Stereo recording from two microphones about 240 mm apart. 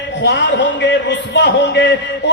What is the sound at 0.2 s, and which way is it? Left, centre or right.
Speech, left.